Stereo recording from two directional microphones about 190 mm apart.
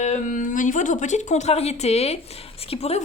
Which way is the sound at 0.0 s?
40° left (ahead or behind).